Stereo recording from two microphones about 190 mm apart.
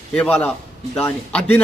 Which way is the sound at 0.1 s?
5° left (ahead or behind).